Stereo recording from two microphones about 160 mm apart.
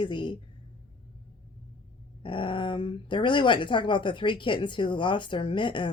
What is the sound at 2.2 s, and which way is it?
Speech, 30° left (ahead or behind).